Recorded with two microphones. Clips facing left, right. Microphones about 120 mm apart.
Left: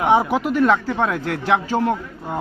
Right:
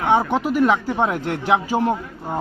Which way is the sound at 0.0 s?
20° left (ahead or behind).